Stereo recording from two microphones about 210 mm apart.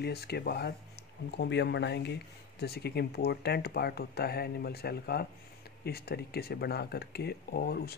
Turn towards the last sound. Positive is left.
turn(degrees=50)  # may be behind; listen again after turning